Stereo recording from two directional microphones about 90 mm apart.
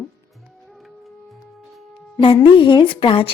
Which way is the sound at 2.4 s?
65° left (ahead or behind).